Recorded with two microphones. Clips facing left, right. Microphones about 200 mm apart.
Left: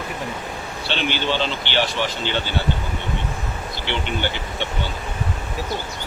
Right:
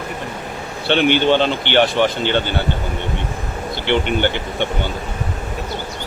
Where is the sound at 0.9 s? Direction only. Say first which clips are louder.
Right 10 dB; 55° right (ahead or behind).